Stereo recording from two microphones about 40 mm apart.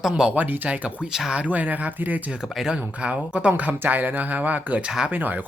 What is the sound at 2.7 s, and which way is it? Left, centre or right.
Speech, right.